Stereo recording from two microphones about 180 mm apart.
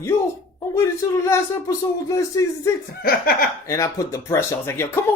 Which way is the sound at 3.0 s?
55° left (ahead or behind).